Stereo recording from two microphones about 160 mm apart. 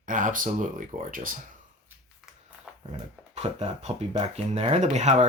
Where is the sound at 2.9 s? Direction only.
45° right (ahead or behind).